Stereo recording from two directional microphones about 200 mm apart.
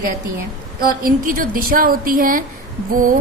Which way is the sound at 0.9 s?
45° right (ahead or behind).